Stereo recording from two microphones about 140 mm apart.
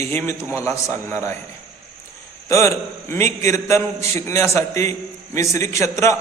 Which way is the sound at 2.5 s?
20° left (ahead or behind).